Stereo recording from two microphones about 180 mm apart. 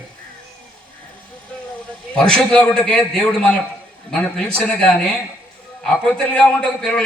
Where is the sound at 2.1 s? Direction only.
5° left (ahead or behind).